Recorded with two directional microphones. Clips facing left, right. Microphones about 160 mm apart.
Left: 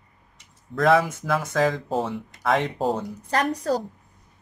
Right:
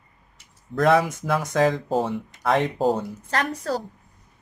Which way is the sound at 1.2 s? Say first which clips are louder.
Right 2 dB; centre (ahead or behind).